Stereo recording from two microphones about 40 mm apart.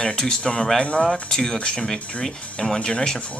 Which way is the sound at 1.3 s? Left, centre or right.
Centre.